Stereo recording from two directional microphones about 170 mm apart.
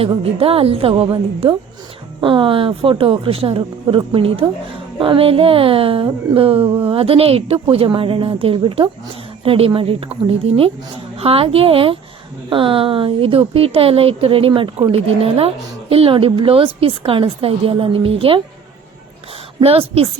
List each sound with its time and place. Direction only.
0.0 s a woman's voice: 35° right (ahead or behind)
19.5 s a woman's voice: 35° right (ahead or behind)